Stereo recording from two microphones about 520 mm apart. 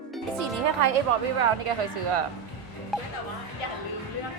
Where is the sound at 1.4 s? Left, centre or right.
Right.